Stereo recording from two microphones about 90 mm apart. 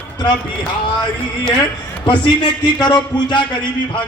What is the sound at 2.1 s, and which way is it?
A man's voice, 55° left (ahead or behind).